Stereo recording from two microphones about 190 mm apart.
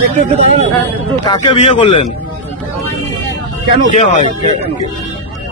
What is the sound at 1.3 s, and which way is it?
Speech, 30° left (ahead or behind).